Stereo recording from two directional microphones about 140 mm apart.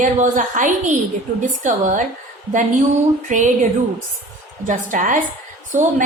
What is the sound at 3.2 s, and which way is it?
A woman's voice, 65° right (ahead or behind).